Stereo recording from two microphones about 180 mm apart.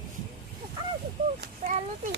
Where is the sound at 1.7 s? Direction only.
45° right (ahead or behind).